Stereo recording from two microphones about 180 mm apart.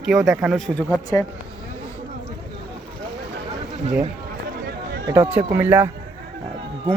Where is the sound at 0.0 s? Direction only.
Centre (ahead or behind).